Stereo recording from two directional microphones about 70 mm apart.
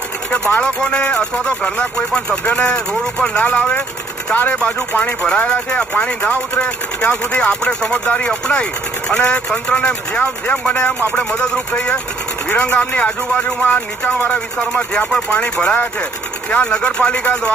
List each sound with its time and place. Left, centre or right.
0.3 s speech: centre